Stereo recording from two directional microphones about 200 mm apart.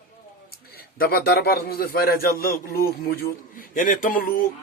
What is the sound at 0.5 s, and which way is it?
Speech, 50° left (ahead or behind).